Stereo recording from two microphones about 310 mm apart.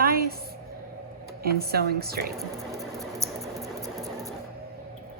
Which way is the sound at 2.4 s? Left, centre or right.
Centre.